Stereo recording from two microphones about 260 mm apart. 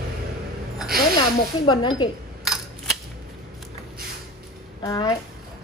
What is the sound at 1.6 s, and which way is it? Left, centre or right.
Speech, centre.